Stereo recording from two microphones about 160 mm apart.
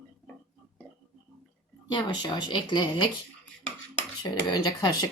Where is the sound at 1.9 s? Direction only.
30° left (ahead or behind).